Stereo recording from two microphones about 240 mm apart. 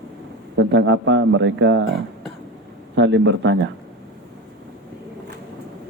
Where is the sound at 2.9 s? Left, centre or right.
Right.